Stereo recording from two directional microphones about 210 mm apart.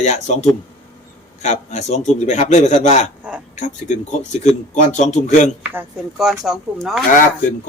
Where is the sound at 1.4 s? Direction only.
35° left (ahead or behind).